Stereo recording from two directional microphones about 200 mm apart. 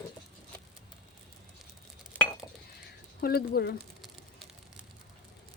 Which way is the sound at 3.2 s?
50° left (ahead or behind).